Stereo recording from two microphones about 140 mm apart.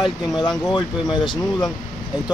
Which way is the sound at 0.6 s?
30° left (ahead or behind).